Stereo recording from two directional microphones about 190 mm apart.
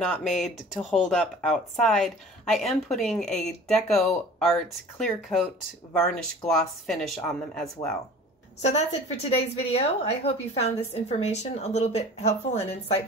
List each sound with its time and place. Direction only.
0.0 s a woman's voice: centre (ahead or behind)
8.6 s a woman's voice: 35° left (ahead or behind)